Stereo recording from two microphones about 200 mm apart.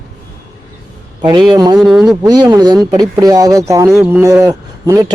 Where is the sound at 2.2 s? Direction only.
20° right (ahead or behind).